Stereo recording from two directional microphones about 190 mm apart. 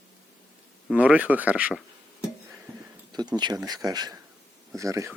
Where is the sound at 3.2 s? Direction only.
20° right (ahead or behind).